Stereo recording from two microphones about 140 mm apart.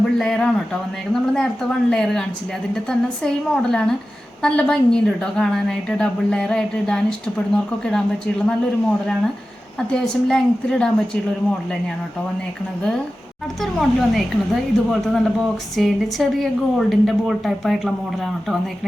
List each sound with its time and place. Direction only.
0.2 s a woman's voice: 5° left (ahead or behind)
13.6 s a woman's voice: centre (ahead or behind)